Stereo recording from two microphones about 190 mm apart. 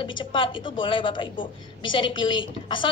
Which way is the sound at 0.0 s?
25° left (ahead or behind).